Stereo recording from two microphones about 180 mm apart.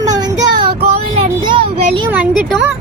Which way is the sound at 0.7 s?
60° right (ahead or behind).